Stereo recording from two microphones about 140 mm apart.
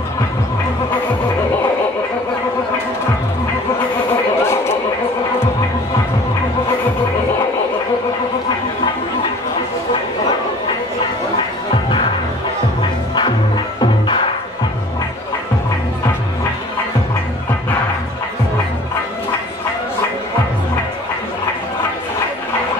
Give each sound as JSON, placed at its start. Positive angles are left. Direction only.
{"t": 4.4, "sound": "a sound", "side_deg": 20}
{"t": 11.3, "sound": "music", "side_deg": 35}
{"t": 13.7, "sound": "music", "side_deg": 35}